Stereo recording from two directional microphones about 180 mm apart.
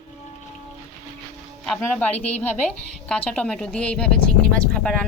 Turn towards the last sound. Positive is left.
turn(degrees=5)  # may be behind; listen again after turning